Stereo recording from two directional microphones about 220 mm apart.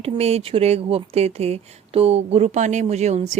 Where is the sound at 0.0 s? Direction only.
30° right (ahead or behind).